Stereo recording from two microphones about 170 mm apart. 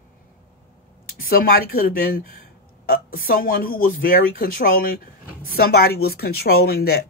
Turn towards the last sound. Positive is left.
turn(degrees=65)  # may be behind; listen again after turning